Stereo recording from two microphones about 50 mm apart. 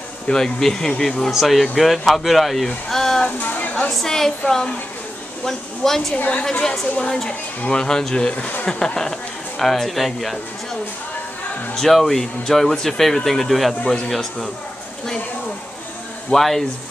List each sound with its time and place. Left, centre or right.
0.3 s speech: centre
1.3 s speech: centre
3.3 s a sound: left
3.9 s speech: centre
6.1 s a woman's voice: left
7.2 s speech: centre
9.6 s speech: centre
11.7 s speech: centre
16.3 s speech: centre